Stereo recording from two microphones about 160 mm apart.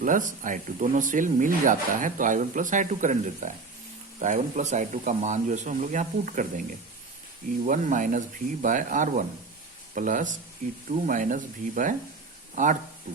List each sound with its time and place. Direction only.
0.0 s speech: 55° right (ahead or behind)
7.7 s speech: 55° right (ahead or behind)